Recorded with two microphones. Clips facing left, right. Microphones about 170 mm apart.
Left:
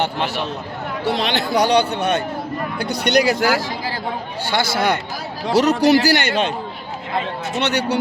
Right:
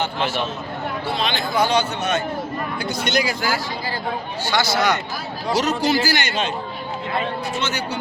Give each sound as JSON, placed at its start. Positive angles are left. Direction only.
{"t": 1.0, "sound": "a man's voice", "side_deg": 75}
{"t": 4.4, "sound": "speech", "side_deg": 55}
{"t": 5.5, "sound": "a man's voice", "side_deg": 65}
{"t": 7.6, "sound": "speech", "side_deg": 65}